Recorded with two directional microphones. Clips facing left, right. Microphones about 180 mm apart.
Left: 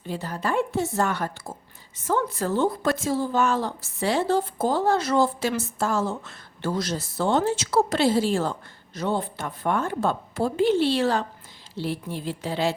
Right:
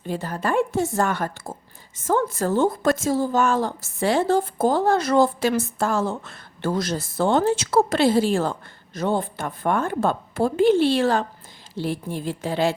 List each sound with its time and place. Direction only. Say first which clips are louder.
0.1 s a woman's voice: right 3 dB; 50° right (ahead or behind)